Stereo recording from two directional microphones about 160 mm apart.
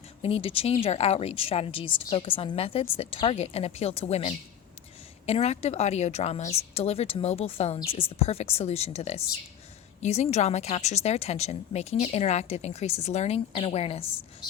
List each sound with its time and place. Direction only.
0.2 s a woman's voice: 40° left (ahead or behind)